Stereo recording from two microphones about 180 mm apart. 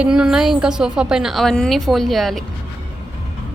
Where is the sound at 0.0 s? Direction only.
5° right (ahead or behind).